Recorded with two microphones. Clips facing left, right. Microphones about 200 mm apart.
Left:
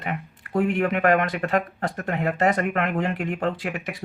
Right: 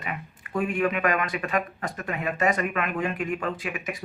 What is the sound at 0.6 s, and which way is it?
Speech, 65° left (ahead or behind).